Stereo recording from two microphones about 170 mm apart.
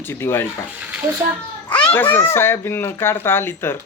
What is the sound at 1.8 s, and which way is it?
Speech, 10° left (ahead or behind).